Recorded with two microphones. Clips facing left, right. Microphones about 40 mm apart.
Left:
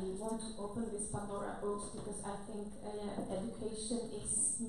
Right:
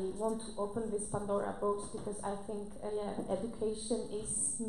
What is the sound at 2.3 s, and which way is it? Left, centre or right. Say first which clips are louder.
Speech: right 6 dB; right.